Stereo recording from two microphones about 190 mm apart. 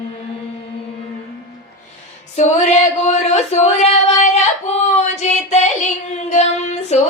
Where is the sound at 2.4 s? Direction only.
35° left (ahead or behind).